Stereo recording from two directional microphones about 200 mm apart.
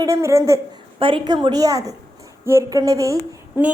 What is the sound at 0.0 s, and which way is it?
Speech, 15° right (ahead or behind).